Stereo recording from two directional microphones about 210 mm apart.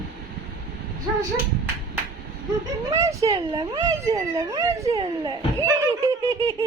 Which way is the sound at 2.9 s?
15° right (ahead or behind).